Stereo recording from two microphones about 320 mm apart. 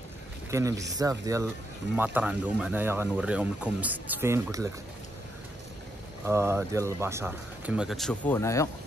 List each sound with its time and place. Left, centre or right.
0.5 s speech: centre
6.2 s speech: centre